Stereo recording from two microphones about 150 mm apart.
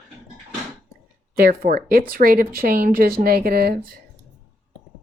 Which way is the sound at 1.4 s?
80° right.